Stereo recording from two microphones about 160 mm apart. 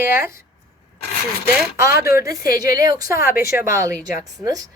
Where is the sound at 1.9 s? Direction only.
70° left (ahead or behind).